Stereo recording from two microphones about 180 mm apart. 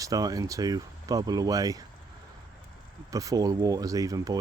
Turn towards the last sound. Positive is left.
turn(degrees=-20)  # may be behind; listen again after turning